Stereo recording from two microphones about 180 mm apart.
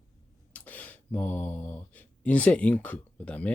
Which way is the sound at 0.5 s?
10° left (ahead or behind).